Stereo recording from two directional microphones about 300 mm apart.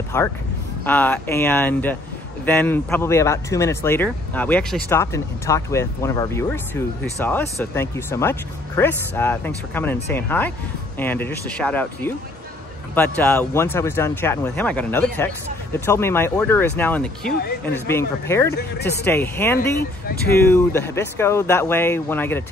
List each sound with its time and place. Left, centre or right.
0.1 s speech: centre
18.8 s speech: left
19.0 s speech: centre